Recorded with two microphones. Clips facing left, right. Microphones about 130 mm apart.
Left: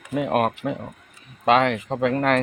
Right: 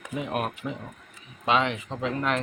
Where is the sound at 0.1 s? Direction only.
65° left (ahead or behind).